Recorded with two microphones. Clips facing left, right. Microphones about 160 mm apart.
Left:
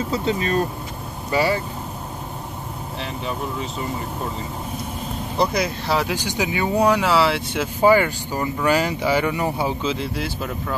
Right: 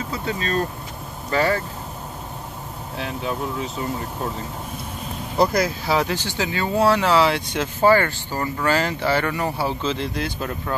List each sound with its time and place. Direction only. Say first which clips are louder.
0.1 s speech: left 3 dB; 25° left (ahead or behind); by 1.6 s 10° left (ahead or behind)
3.0 s speech: right 2 dB; centre (ahead or behind)
6.1 s speech: left 2 dB; 15° left (ahead or behind)